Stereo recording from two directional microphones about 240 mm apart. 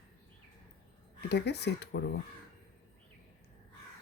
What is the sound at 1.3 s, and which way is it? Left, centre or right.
Speech, left.